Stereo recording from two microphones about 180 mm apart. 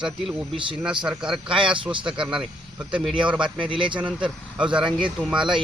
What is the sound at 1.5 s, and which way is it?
Speech, 30° right (ahead or behind).